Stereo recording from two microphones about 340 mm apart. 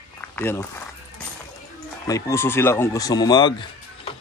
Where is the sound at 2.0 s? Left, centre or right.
Centre.